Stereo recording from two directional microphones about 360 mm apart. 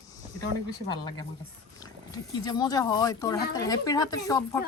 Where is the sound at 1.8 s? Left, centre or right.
Centre.